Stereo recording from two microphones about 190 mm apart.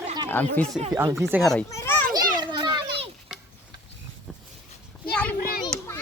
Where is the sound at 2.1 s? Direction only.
20° right (ahead or behind).